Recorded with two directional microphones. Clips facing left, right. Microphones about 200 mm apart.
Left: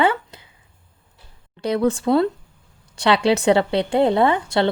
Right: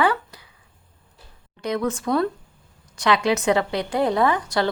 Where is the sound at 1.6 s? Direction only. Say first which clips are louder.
Left 5 dB; 30° left (ahead or behind).